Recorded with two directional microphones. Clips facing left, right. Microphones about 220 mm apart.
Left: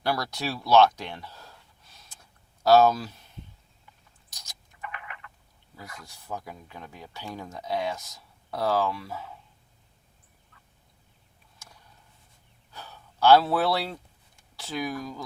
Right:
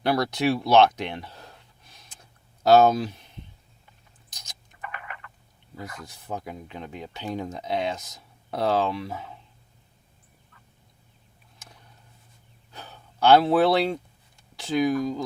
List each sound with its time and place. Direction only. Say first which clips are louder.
0.0 s speech: right 6 dB; 20° right (ahead or behind)
4.3 s rodents: right 2 dB; 20° right (ahead or behind)
4.9 s a sound: right 2 dB; 45° right (ahead or behind)
6.1 s speech: right 1 dB; 20° right (ahead or behind)
12.7 s speech: right 1 dB; 20° right (ahead or behind)